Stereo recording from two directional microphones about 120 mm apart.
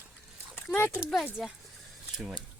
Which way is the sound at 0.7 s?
20° left (ahead or behind).